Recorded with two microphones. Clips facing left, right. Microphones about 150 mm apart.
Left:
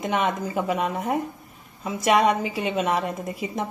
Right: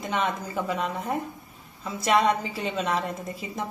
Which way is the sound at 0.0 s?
15° left (ahead or behind).